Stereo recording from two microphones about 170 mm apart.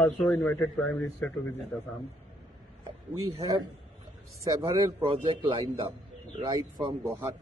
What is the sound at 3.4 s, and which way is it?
Speech, 25° right (ahead or behind).